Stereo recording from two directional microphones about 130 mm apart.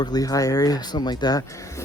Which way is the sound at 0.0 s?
30° left (ahead or behind).